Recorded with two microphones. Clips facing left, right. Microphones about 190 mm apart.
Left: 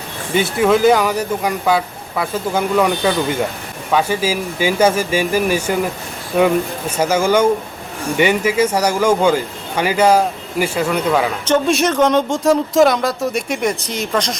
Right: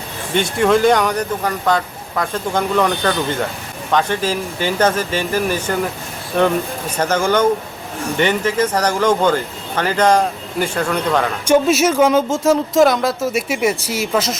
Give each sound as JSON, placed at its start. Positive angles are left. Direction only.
{"t": 0.3, "sound": "speech", "side_deg": 5}
{"t": 11.4, "sound": "speech", "side_deg": -10}